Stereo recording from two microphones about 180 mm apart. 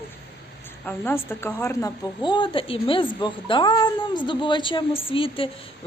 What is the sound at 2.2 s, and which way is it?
A woman's voice, 25° left (ahead or behind).